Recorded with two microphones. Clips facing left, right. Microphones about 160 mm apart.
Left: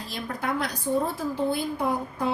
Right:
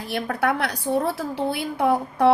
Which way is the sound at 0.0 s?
70° right (ahead or behind).